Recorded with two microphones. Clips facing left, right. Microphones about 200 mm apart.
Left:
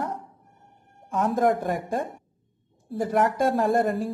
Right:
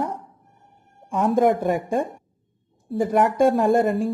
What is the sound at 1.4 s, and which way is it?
Speech, centre (ahead or behind).